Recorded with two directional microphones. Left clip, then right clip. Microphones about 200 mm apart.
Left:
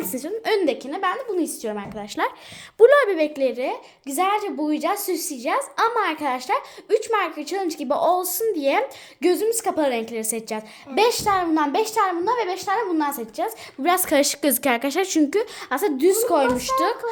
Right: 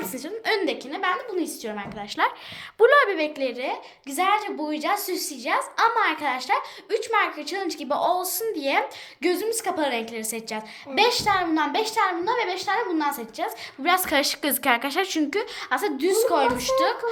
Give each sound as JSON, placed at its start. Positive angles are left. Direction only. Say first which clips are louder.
{"t": 0.0, "sound": "a woman's voice", "louder": "left 3 dB", "side_deg": 60}